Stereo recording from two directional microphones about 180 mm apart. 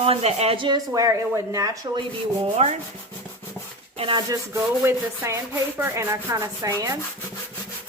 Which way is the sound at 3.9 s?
30° right (ahead or behind).